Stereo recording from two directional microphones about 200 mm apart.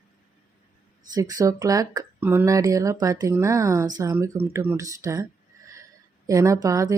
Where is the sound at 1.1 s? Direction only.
15° right (ahead or behind).